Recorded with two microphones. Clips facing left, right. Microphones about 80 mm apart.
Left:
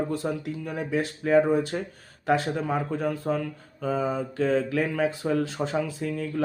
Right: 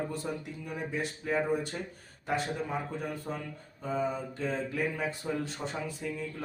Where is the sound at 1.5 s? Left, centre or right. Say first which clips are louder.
Left 7 dB; left.